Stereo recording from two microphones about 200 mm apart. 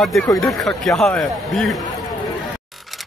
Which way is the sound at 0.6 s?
Centre (ahead or behind).